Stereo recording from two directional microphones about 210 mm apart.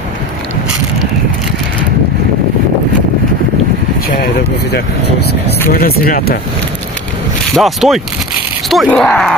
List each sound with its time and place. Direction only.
4.2 s speech: 50° left (ahead or behind)
7.5 s speech: centre (ahead or behind)